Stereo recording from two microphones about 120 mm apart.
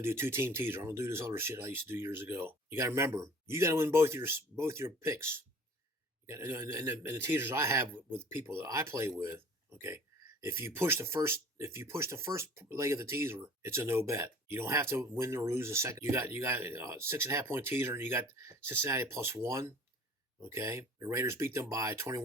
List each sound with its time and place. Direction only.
0.0 s speech: 20° right (ahead or behind)